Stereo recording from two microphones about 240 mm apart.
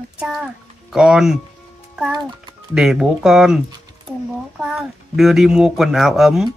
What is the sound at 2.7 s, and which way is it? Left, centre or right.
Speech, centre.